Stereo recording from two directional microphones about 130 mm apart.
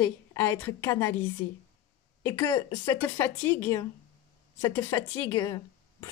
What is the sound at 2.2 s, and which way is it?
Speech, 25° left (ahead or behind).